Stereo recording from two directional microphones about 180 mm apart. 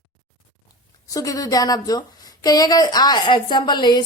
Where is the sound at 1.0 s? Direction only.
20° left (ahead or behind).